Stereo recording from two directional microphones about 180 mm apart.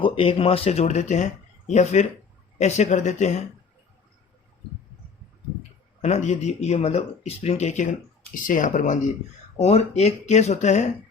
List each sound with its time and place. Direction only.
0.0 s a man's voice: 30° left (ahead or behind)
6.0 s a man's voice: 40° left (ahead or behind)